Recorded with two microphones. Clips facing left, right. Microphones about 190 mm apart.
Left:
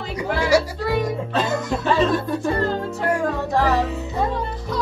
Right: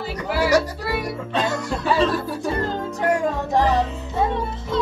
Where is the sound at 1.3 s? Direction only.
Centre (ahead or behind).